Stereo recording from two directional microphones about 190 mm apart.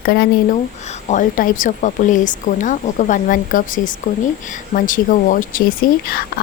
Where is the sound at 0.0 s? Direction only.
55° left (ahead or behind).